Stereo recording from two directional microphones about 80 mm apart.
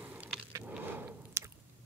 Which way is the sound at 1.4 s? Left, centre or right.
Right.